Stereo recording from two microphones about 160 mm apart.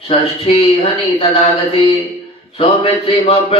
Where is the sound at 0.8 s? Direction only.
35° left (ahead or behind).